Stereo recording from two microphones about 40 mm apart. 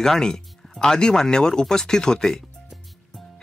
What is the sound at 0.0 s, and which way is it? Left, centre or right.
Speech, centre.